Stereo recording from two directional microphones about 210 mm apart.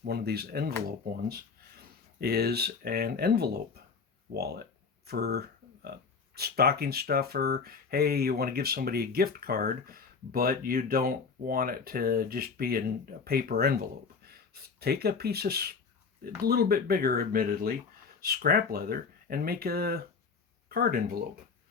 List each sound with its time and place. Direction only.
0.0 s speech: 50° right (ahead or behind)